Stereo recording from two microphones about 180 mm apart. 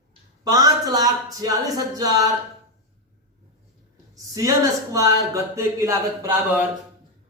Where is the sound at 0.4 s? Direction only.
20° right (ahead or behind).